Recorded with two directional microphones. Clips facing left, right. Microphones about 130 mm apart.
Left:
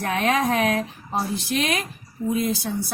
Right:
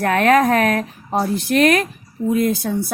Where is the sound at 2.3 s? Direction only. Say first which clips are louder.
Right 6 dB; 55° right (ahead or behind).